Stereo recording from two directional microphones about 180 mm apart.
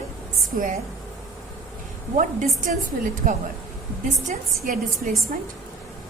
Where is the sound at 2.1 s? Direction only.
45° right (ahead or behind).